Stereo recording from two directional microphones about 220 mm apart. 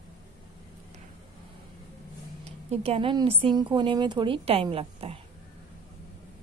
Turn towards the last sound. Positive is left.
turn(degrees=-25)  # may be behind; listen again after turning